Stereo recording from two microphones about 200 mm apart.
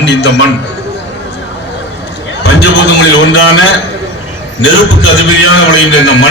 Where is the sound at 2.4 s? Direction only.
60° left (ahead or behind).